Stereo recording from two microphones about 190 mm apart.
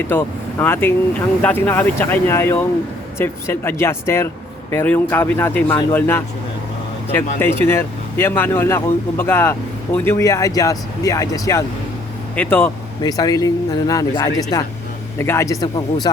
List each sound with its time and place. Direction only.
0.1 s speech: 10° left (ahead or behind)